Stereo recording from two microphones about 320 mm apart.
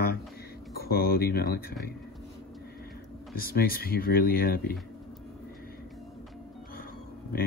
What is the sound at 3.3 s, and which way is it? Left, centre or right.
Speech, left.